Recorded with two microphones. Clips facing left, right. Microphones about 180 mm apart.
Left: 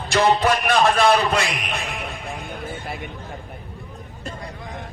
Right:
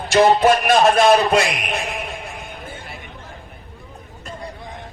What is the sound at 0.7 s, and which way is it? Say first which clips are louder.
A man's voice: right 2 dB; 40° right (ahead or behind).